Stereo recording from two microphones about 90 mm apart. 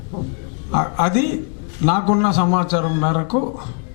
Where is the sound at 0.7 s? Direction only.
15° left (ahead or behind).